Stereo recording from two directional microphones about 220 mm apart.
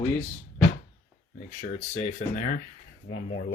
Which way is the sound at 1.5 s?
35° left (ahead or behind).